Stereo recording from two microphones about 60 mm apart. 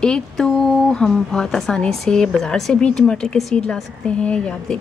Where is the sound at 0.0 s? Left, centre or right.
Centre.